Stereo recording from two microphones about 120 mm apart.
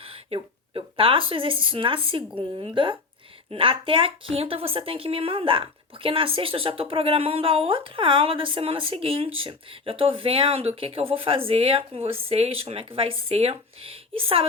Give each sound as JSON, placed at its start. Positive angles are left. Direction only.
{"t": 0.3, "sound": "a woman's voice", "side_deg": -45}